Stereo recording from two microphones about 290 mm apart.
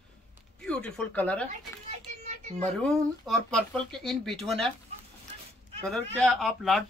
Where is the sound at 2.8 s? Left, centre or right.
Centre.